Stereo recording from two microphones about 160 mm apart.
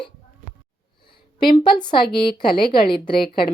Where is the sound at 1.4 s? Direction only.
30° left (ahead or behind).